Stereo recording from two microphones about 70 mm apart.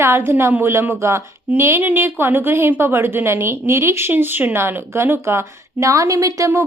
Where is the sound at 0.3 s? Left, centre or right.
Right.